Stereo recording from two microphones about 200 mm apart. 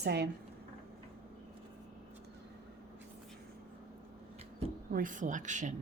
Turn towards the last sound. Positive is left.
turn(degrees=-40)  # may be behind; listen again after turning